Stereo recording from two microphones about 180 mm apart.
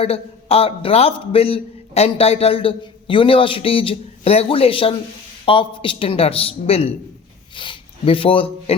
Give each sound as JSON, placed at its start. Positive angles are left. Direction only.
{"t": 0.0, "sound": "a man's voice", "side_deg": 35}